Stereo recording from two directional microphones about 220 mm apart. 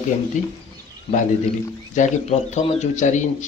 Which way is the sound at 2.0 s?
35° left (ahead or behind).